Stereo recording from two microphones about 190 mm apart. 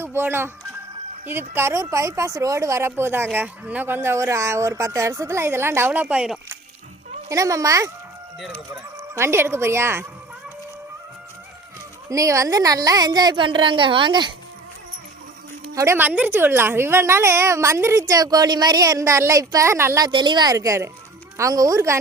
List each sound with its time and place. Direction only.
0.0 s speech: 10° right (ahead or behind)
7.3 s speech: 15° right (ahead or behind)
9.0 s speech: 15° right (ahead or behind)
12.0 s a woman's voice: 15° right (ahead or behind)
15.7 s speech: 15° right (ahead or behind)
20.1 s a woman's voice: 25° right (ahead or behind)